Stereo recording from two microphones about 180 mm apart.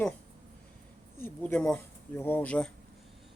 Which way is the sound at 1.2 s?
10° left (ahead or behind).